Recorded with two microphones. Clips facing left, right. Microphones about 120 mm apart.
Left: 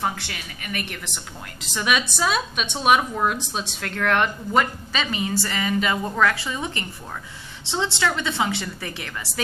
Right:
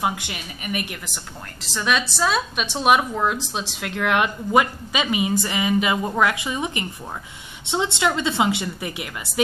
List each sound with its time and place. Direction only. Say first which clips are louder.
0.0 s a woman's voice: right 2 dB; 15° right (ahead or behind)
1.7 s a woman's voice: right 1 dB; 5° left (ahead or behind); by 9.1 s 15° right (ahead or behind)